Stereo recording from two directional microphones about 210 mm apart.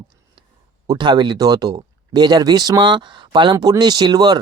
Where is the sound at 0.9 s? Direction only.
20° right (ahead or behind).